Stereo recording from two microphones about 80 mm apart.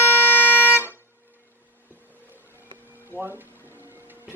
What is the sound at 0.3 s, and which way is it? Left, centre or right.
Music, left.